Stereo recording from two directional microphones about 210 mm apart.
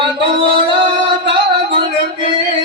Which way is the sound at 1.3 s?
25° right (ahead or behind).